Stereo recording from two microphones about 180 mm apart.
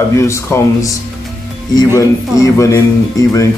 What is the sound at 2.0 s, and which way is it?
Speech, 15° left (ahead or behind).